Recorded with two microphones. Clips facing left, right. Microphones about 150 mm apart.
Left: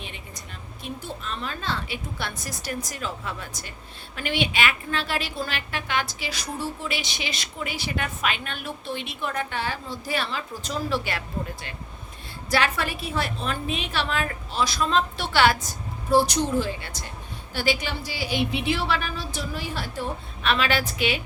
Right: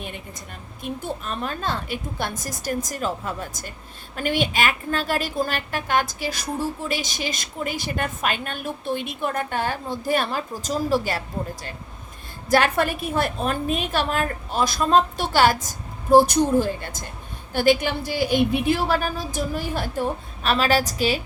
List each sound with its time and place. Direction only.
1.0 s a woman's voice: 50° right (ahead or behind)
12.5 s a woman's voice: 50° right (ahead or behind)